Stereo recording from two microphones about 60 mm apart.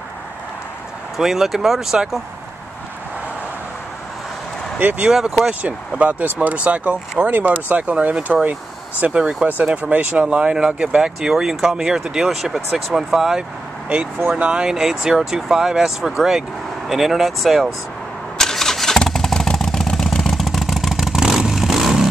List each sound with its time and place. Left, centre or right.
1.1 s speech: centre
4.7 s speech: right
5.0 s speech: centre
18.4 s vehicle: centre